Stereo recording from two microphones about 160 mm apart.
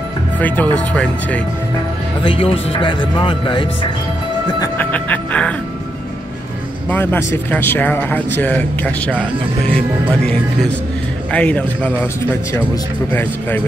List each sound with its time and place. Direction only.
0.4 s speech: 10° left (ahead or behind)
2.2 s speech: 35° left (ahead or behind)
4.7 s speech: 10° left (ahead or behind)
6.9 s speech: 15° left (ahead or behind)
11.3 s speech: 10° left (ahead or behind)
13.1 s speech: 10° left (ahead or behind)